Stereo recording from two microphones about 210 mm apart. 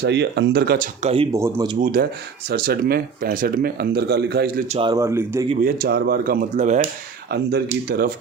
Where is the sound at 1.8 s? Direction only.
45° right (ahead or behind).